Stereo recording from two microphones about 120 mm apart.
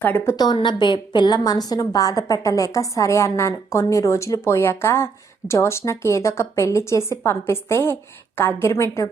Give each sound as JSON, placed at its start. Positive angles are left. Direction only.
{"t": 0.0, "sound": "a woman's voice", "side_deg": 15}
{"t": 0.3, "sound": "a woman's voice", "side_deg": 40}